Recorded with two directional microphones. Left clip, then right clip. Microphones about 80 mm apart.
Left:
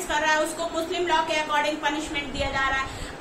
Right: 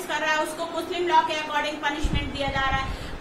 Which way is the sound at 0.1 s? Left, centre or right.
Left.